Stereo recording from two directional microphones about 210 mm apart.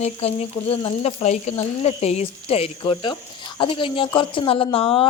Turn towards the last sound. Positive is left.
turn(degrees=25)  # may be behind; listen again after turning